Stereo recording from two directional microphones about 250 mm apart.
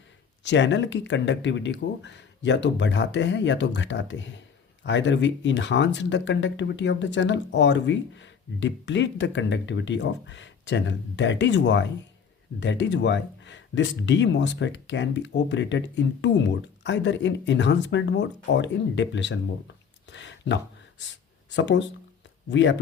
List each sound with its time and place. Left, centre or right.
0.4 s speech: left